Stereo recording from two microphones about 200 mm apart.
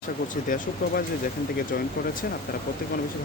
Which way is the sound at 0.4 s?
40° left (ahead or behind).